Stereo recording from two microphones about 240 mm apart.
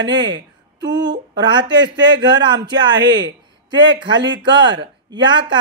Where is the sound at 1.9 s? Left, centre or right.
Right.